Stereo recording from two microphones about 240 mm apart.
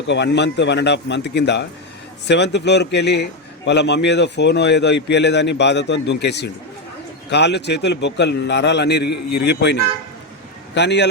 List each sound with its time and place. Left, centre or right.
0.1 s a man's voice: left